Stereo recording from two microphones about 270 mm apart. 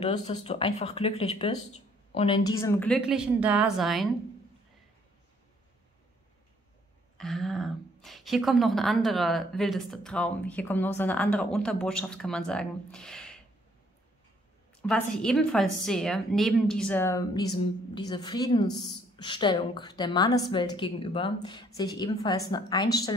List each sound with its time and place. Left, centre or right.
0.0 s a woman's voice: left; by 4.1 s centre
7.2 s a woman's voice: centre
14.8 s a woman's voice: centre